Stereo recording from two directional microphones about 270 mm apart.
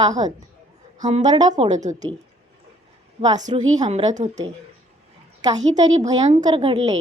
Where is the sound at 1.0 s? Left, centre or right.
Right.